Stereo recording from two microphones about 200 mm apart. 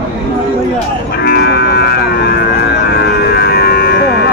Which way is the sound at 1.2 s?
55° left (ahead or behind).